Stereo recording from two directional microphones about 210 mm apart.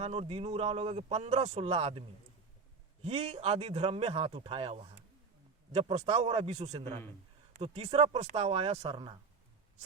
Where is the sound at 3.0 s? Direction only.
30° right (ahead or behind).